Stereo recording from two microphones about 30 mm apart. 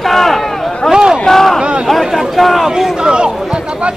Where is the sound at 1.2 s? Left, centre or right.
Centre.